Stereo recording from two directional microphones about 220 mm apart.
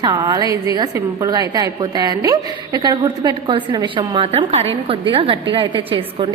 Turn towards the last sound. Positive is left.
turn(degrees=-25)  # may be behind; listen again after turning